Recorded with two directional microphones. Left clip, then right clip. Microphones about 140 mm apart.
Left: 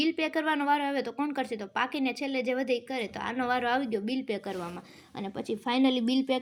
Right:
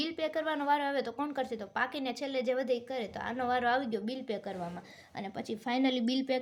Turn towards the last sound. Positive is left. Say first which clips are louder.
# left 4 dB
turn(degrees=10)  # may be behind; listen again after turning